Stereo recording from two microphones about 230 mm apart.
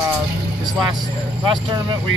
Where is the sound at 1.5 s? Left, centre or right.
Right.